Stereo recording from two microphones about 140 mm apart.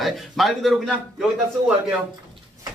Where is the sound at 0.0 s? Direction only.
Centre (ahead or behind).